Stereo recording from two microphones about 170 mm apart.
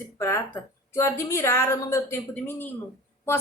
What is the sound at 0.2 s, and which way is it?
A woman's voice, 15° left (ahead or behind).